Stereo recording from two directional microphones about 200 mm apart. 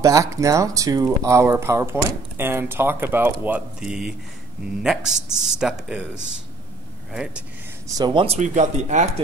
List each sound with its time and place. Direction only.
0.0 s speech: 15° right (ahead or behind)
6.1 s speech: 65° right (ahead or behind)
7.1 s speech: 5° right (ahead or behind)
8.0 s speech: 25° right (ahead or behind)
8.4 s speech: 35° right (ahead or behind)